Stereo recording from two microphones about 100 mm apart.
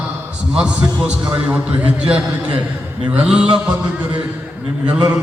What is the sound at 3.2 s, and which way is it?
Speech, 10° right (ahead or behind).